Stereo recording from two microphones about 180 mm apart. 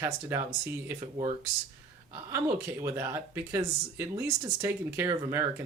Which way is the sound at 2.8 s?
15° right (ahead or behind).